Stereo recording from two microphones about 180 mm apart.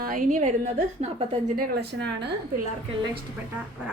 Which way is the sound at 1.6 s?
65° right (ahead or behind).